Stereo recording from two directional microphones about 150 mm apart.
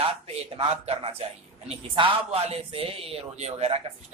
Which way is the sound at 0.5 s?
40° right (ahead or behind).